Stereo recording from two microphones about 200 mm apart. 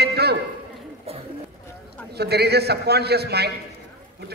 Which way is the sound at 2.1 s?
55° right (ahead or behind).